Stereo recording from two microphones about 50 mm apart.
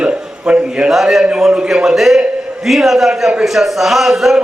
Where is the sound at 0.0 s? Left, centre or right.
Right.